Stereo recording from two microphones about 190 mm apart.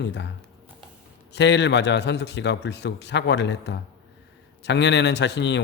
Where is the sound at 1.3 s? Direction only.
65° left (ahead or behind).